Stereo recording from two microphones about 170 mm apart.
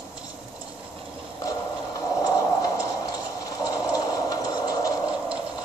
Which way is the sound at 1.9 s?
20° left (ahead or behind).